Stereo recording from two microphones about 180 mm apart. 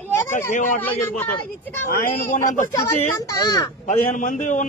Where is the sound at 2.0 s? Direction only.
45° left (ahead or behind).